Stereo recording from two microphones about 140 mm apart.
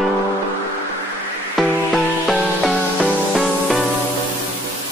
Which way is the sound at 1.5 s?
Centre (ahead or behind).